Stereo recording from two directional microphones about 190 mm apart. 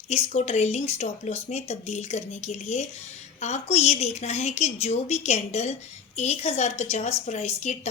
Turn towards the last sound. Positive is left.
turn(degrees=35)  # may be behind; listen again after turning